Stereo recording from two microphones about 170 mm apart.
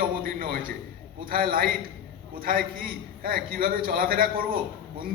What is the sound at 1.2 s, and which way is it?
A man's voice, 55° right (ahead or behind).